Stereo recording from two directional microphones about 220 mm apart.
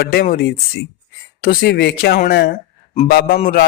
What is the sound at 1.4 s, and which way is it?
A man's voice, 45° left (ahead or behind).